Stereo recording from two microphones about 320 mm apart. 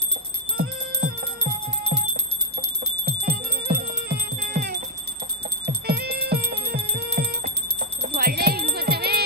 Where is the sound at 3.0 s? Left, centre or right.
Right.